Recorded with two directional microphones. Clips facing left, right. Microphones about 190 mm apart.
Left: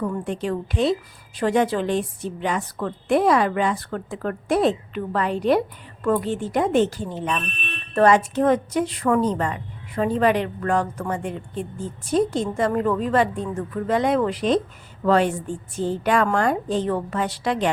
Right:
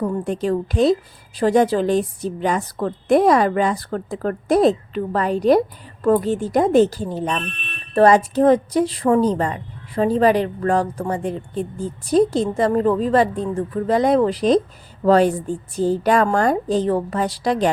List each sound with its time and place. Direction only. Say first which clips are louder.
0.0 s a woman's voice: right 4 dB; 35° right (ahead or behind)